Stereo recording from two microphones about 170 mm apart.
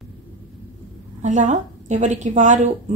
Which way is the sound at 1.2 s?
45° right (ahead or behind).